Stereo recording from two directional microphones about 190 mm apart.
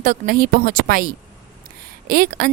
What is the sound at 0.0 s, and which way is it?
A woman's voice, 45° right (ahead or behind).